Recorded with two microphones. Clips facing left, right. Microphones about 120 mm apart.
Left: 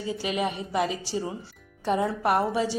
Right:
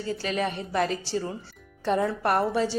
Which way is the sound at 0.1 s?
10° left (ahead or behind).